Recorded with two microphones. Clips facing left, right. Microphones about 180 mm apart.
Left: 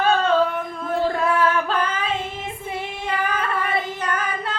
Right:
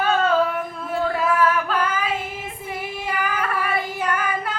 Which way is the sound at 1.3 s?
25° left (ahead or behind).